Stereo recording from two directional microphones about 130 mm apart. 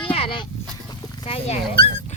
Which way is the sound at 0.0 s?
45° left (ahead or behind).